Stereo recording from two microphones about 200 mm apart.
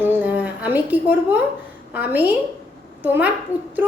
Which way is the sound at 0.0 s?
10° right (ahead or behind).